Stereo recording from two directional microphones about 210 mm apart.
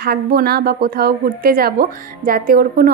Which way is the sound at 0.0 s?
50° right (ahead or behind).